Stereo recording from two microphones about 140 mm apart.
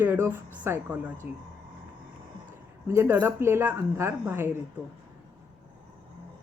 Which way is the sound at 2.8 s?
15° right (ahead or behind).